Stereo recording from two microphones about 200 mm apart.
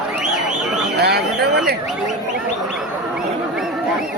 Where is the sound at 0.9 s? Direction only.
55° right (ahead or behind).